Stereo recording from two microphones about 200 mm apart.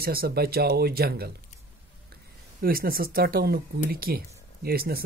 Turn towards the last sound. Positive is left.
turn(degrees=-50)  # may be behind; listen again after turning